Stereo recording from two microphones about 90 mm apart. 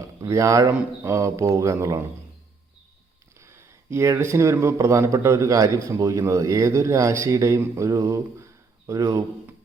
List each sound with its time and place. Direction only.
0.2 s a man's voice: 35° right (ahead or behind)
3.4 s a sound: 30° right (ahead or behind)
4.2 s a man's voice: 35° right (ahead or behind)